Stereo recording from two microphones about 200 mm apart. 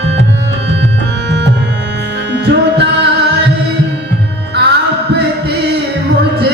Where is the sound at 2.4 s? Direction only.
55° right (ahead or behind).